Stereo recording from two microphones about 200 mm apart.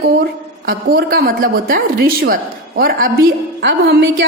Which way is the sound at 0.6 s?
45° right (ahead or behind).